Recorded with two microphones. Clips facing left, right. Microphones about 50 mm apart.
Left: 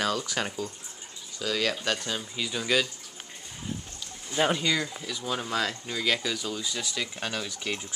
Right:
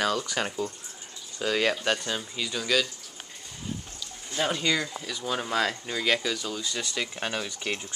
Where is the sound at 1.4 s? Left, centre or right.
Right.